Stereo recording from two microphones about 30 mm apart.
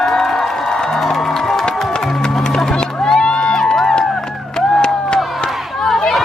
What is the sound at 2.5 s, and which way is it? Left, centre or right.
Run, centre.